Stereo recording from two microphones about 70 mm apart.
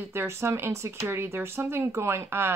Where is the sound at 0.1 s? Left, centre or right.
Right.